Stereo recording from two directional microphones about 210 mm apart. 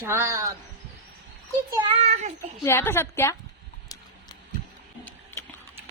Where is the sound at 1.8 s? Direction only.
25° right (ahead or behind).